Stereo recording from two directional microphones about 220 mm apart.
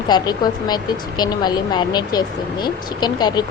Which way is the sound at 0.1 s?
20° left (ahead or behind).